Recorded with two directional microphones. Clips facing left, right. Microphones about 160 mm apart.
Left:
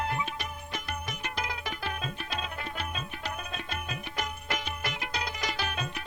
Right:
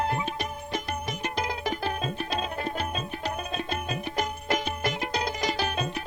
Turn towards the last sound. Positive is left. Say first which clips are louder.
# right 6 dB
turn(degrees=-35)  # may be behind; listen again after turning